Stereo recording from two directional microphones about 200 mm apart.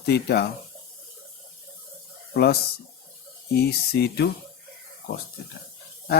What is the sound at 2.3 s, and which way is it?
Speech, 55° left (ahead or behind).